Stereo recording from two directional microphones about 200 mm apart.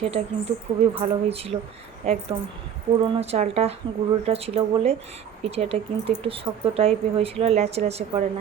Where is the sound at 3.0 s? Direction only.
30° right (ahead or behind).